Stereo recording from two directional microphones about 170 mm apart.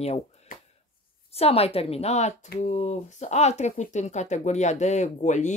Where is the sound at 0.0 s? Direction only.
40° left (ahead or behind).